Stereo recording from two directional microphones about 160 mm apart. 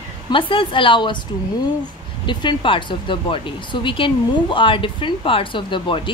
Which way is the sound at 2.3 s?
30° left (ahead or behind).